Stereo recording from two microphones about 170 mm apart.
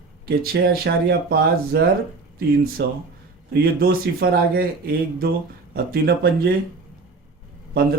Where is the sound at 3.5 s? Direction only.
65° right (ahead or behind).